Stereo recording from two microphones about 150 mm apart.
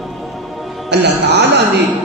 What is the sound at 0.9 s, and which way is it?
Speech, 90° right.